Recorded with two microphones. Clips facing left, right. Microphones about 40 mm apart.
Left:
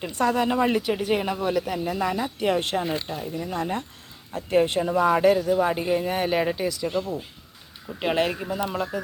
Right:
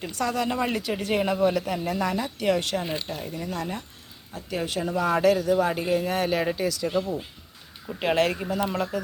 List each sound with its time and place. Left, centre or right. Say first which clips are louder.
0.0 s speech: left 4 dB; left
0.5 s speech: left 4 dB; centre
0.9 s speech: right 1 dB; centre
2.2 s speech: left 1 dB; centre
3.1 s speech: left 1 dB; centre
3.5 s speech: left 5 dB; left
4.3 s speech: left 9 dB; left
4.8 s speech: left 3 dB; centre
7.9 s speech: right 1 dB; centre